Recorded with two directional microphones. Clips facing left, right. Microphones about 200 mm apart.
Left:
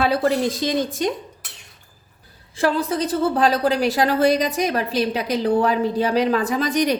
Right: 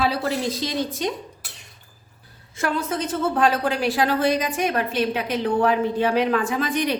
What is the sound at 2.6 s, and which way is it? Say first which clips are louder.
A woman's voice: left 4 dB; 35° left (ahead or behind).